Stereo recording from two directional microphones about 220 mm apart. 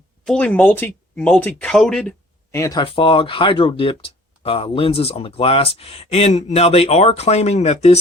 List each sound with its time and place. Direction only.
0.3 s speech: 5° left (ahead or behind); by 7.9 s 30° left (ahead or behind)